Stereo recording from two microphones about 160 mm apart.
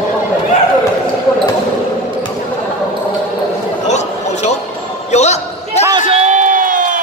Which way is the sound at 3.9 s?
45° left (ahead or behind).